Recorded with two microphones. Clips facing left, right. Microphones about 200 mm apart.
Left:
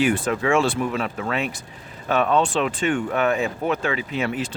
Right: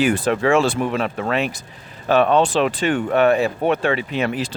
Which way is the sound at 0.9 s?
65° right (ahead or behind).